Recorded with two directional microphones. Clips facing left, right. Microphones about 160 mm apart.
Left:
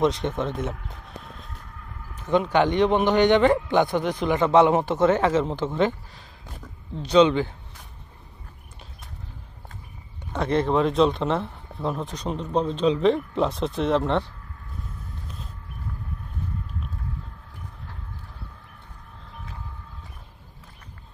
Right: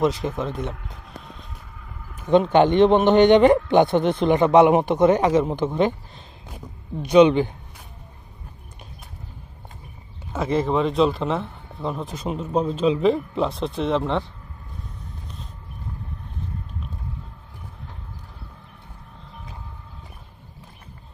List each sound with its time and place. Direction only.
0.0 s speech: centre (ahead or behind)
2.3 s a man's voice: 25° right (ahead or behind)
10.3 s speech: 5° right (ahead or behind)